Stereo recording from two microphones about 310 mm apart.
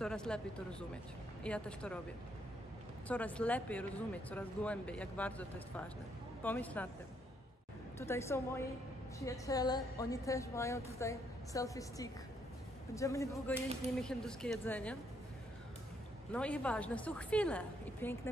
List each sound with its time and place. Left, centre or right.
0.0 s speech: centre
3.1 s speech: centre
6.4 s speech: centre
8.0 s a woman's voice: centre
16.3 s speech: centre